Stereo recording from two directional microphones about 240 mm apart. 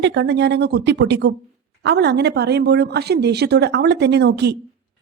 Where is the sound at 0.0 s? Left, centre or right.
Right.